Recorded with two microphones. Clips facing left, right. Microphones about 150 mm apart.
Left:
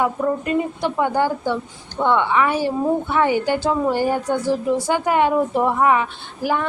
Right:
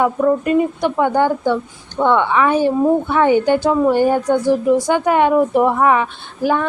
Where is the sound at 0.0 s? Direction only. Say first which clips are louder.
Right 5 dB; 20° right (ahead or behind).